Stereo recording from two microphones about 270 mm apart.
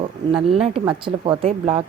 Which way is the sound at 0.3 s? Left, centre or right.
Right.